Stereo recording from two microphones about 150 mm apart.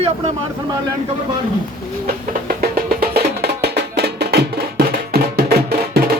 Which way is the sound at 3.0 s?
90° right.